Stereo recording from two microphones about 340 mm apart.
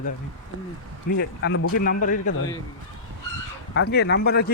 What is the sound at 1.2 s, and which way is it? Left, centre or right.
A man's voice, left.